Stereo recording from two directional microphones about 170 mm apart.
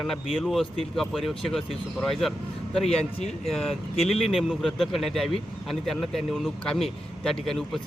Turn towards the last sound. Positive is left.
turn(degrees=0)  # may be behind; listen again after turning